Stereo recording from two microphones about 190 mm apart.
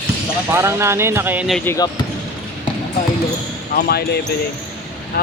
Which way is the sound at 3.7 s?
55° left (ahead or behind).